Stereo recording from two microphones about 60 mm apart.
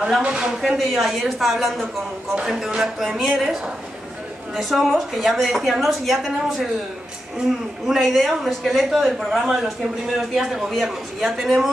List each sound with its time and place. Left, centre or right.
0.2 s a woman's voice: centre
0.5 s a woman's voice: centre
7.8 s a woman's voice: centre